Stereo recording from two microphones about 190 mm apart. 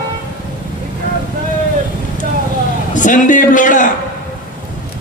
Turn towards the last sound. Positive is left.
turn(degrees=40)  # may be behind; listen again after turning